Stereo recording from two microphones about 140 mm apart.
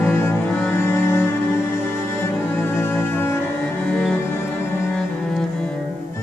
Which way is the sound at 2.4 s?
15° left (ahead or behind).